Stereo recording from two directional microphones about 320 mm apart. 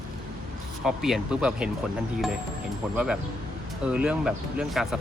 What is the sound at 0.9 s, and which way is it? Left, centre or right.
Speech, centre.